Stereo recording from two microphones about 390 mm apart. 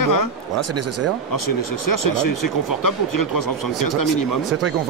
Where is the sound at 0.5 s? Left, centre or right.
Right.